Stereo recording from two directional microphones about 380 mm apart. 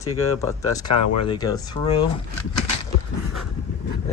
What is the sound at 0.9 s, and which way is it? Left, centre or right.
Speech, left.